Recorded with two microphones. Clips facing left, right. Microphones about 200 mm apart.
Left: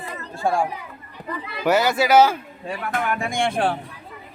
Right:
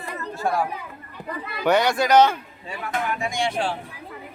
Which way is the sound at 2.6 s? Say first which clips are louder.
Left 2 dB; 55° left (ahead or behind).